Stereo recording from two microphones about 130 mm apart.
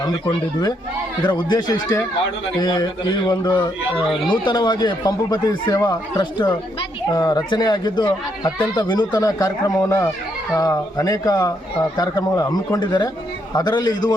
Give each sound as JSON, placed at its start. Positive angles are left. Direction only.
{"t": 1.2, "sound": "speech", "side_deg": 35}